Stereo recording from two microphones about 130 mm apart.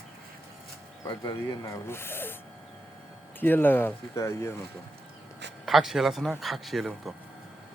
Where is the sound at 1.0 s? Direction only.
30° left (ahead or behind).